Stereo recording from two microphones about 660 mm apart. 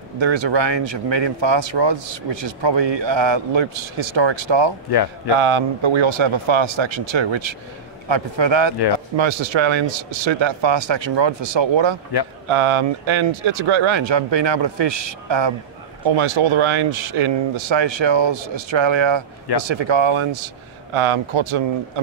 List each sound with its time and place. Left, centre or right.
0.2 s speech: right
4.9 s a man's voice: left
5.4 s speech: right